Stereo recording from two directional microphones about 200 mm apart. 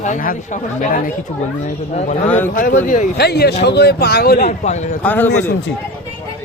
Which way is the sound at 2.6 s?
40° left (ahead or behind).